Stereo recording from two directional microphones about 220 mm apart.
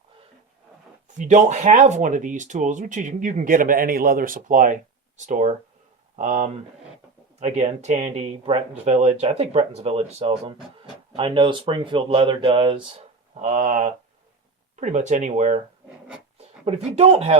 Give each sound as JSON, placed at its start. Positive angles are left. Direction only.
{"t": 1.2, "sound": "speech", "side_deg": -35}
{"t": 16.6, "sound": "speech", "side_deg": -30}